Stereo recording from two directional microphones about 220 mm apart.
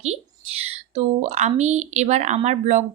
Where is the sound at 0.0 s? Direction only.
30° right (ahead or behind).